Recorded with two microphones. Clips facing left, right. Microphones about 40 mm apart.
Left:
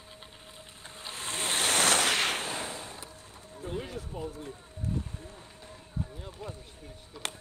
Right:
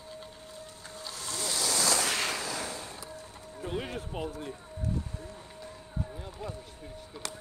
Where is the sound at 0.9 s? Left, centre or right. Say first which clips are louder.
Left 2 dB; left.